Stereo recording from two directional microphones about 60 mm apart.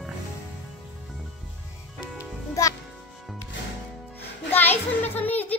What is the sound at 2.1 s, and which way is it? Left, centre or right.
Music, left.